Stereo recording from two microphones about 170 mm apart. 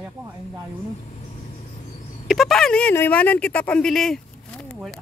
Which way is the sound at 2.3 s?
Centre (ahead or behind).